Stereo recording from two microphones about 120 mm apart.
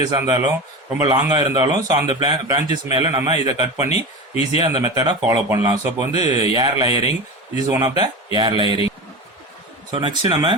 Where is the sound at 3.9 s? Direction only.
60° left (ahead or behind).